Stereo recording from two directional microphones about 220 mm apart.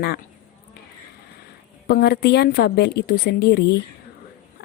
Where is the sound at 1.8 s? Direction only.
45° left (ahead or behind).